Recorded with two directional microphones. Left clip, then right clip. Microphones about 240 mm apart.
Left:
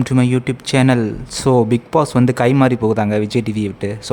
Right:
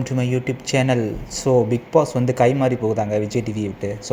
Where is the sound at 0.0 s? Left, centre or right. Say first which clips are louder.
Left 6 dB; centre.